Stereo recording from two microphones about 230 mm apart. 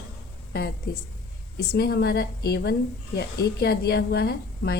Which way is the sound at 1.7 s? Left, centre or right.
Left.